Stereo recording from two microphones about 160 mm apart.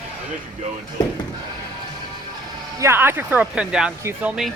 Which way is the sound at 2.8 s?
15° right (ahead or behind).